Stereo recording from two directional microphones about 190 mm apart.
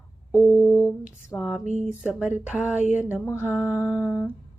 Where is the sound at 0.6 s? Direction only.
10° left (ahead or behind).